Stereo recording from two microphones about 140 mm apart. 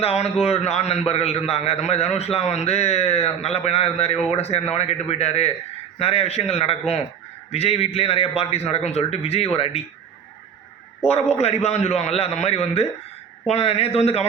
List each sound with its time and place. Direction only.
0.0 s a man's voice: 45° left (ahead or behind)
11.0 s a man's voice: 50° left (ahead or behind)